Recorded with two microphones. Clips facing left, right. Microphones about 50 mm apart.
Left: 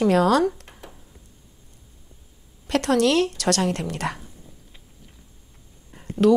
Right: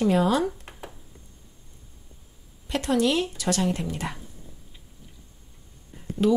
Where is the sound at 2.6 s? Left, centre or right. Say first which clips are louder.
Left 4 dB; left.